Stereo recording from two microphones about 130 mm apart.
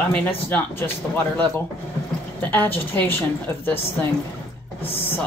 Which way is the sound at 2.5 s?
15° left (ahead or behind).